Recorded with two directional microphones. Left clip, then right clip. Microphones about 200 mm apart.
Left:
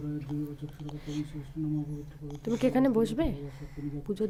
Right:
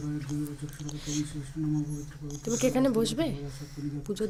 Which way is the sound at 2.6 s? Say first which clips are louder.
Even; 20° left (ahead or behind).